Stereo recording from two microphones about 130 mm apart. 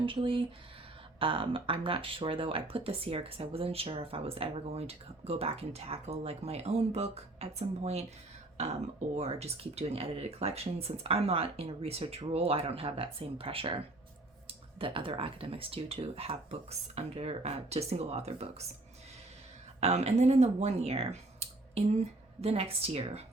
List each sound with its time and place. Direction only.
0.0 s speech: 40° right (ahead or behind)
19.8 s speech: 55° right (ahead or behind)